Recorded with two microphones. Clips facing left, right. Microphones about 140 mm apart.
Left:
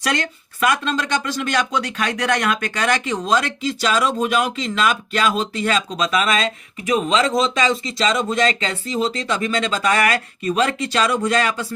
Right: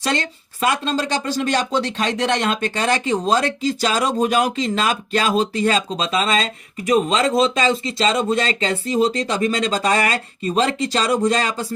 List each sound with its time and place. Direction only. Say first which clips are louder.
0.0 s speech: even; 30° right (ahead or behind)